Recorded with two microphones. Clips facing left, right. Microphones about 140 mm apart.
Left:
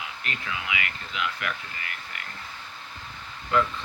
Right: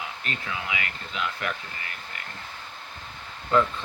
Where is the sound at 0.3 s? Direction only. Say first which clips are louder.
Even; 35° right (ahead or behind).